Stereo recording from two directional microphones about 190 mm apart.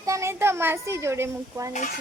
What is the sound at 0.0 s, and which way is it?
Speech, 15° right (ahead or behind).